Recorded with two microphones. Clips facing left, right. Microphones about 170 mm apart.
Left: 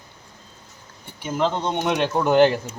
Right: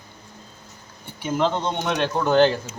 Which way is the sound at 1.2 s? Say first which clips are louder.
Right 1 dB; centre (ahead or behind).